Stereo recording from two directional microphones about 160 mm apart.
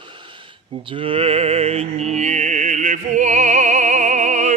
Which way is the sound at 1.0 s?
35° right (ahead or behind).